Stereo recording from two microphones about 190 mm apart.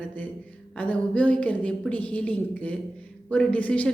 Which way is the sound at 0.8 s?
5° left (ahead or behind).